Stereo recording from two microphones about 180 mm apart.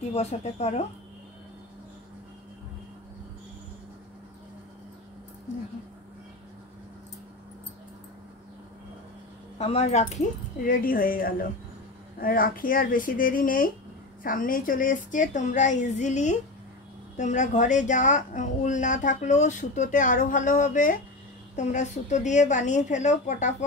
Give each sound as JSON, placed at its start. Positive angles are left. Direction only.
{"t": 0.1, "sound": "a woman's voice", "side_deg": 35}
{"t": 9.6, "sound": "a woman's voice", "side_deg": 35}
{"t": 10.6, "sound": "speech", "side_deg": 50}